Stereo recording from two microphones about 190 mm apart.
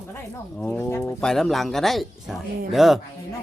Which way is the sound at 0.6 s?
10° left (ahead or behind).